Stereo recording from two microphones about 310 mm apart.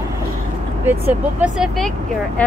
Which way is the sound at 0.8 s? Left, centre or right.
Centre.